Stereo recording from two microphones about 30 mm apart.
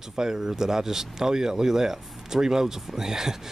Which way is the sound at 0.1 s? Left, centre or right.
Centre.